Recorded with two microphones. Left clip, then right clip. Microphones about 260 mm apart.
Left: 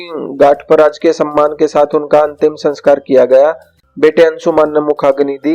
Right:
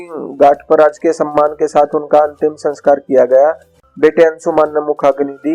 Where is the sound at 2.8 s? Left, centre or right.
Left.